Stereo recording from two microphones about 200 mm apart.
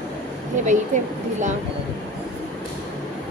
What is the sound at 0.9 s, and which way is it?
Speech, 40° right (ahead or behind).